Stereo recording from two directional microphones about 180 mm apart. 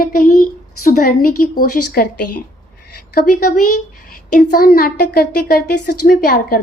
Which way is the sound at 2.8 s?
55° left (ahead or behind).